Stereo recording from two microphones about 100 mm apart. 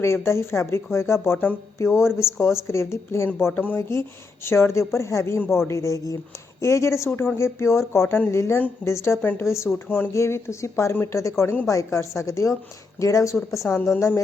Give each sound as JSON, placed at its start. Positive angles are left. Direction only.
{"t": 0.0, "sound": "speech", "side_deg": 25}
{"t": 3.5, "sound": "speech", "side_deg": 15}
{"t": 3.8, "sound": "a woman's voice", "side_deg": 30}